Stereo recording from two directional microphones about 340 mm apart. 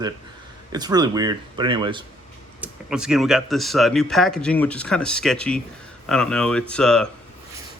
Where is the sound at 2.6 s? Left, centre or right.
Centre.